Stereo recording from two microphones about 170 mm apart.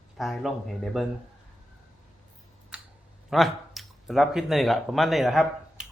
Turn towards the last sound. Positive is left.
turn(degrees=0)  # may be behind; listen again after turning